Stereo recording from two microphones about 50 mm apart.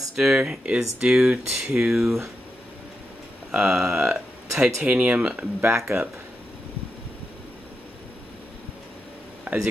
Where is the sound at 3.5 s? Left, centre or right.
Centre.